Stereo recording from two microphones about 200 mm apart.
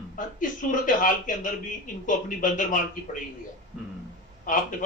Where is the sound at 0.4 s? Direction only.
40° left (ahead or behind).